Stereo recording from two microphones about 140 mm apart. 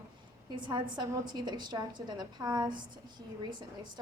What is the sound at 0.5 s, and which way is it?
A woman's voice, 35° right (ahead or behind).